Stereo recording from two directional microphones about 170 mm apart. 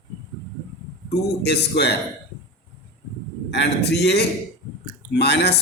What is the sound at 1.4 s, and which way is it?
Speech, 80° left.